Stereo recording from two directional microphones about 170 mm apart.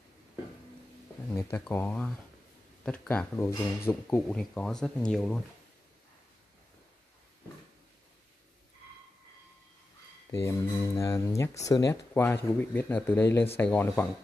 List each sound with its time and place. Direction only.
1.3 s speech: 15° left (ahead or behind)
4.4 s speech: 5° left (ahead or behind)
10.4 s speech: 15° left (ahead or behind)